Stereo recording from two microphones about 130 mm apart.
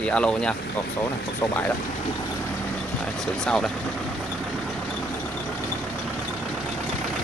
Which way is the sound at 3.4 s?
5° left (ahead or behind).